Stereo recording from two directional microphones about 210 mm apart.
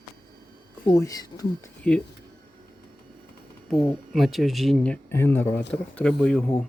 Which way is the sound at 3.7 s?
Centre (ahead or behind).